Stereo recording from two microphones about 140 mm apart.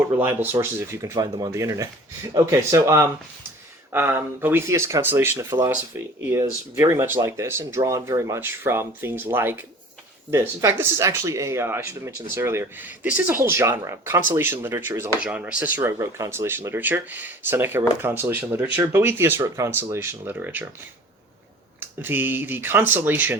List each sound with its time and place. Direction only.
0.2 s speech: 15° right (ahead or behind)
21.8 s speech: 15° right (ahead or behind)